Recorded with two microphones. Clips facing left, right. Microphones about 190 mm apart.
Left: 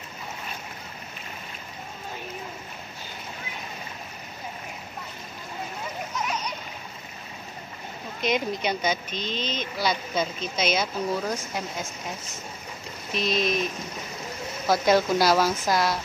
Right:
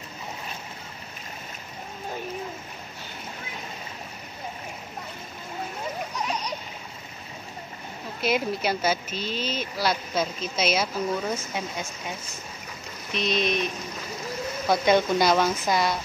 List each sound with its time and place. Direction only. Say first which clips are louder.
6.1 s splash: left 3 dB; 35° right (ahead or behind)
8.2 s speech: right 1 dB; 5° right (ahead or behind)
14.7 s speech: even; centre (ahead or behind)